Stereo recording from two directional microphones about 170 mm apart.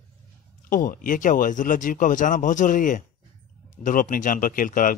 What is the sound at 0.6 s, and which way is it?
Speech, 55° left (ahead or behind).